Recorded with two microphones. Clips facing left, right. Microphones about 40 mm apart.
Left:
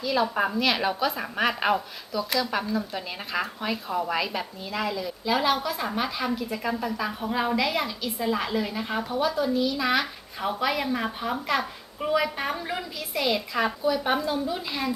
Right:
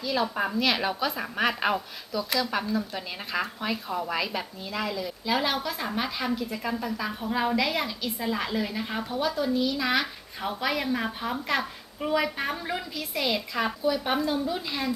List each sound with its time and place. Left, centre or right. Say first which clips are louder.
0.0 s a woman's voice: left 3 dB; centre